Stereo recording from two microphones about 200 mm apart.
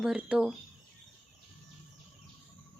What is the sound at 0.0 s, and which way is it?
Speech, 5° right (ahead or behind).